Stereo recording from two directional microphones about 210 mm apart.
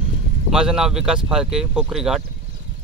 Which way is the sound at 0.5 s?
5° right (ahead or behind).